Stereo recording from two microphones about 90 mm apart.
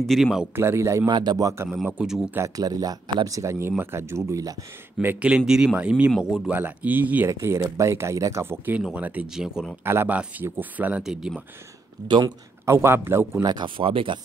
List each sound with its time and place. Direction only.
0.0 s speech: centre (ahead or behind)
0.6 s speech: 30° right (ahead or behind)
1.0 s speech: 55° right (ahead or behind)
1.4 s speech: 30° right (ahead or behind)
2.0 s speech: 5° right (ahead or behind)
2.5 s speech: 45° right (ahead or behind)
5.0 s speech: 20° right (ahead or behind)
5.3 s speech: 10° right (ahead or behind)
7.2 s speech: 30° right (ahead or behind); by 9.8 s 5° right (ahead or behind)
9.8 s speech: 20° right (ahead or behind)
11.0 s speech: 5° right (ahead or behind)
12.1 s speech: 55° right (ahead or behind)
12.6 s speech: 30° right (ahead or behind)
13.4 s speech: 55° right (ahead or behind); by 14.2 s 75° right (ahead or behind)